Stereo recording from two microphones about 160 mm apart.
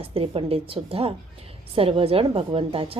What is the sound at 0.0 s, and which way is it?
A woman's voice, 35° right (ahead or behind).